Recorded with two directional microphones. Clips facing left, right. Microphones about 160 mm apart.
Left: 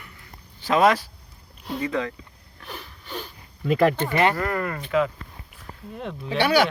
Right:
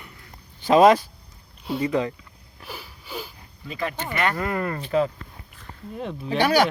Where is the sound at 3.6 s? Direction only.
65° left (ahead or behind).